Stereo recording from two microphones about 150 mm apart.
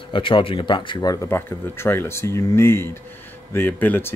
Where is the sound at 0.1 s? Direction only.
35° left (ahead or behind).